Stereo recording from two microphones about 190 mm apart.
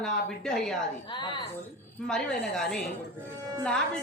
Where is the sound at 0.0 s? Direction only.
5° left (ahead or behind).